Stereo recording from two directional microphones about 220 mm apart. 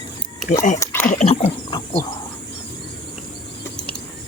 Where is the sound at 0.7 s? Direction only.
10° left (ahead or behind).